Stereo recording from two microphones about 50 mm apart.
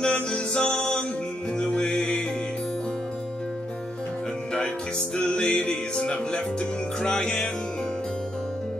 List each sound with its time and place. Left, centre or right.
0.0 s music: centre
5.1 s music: left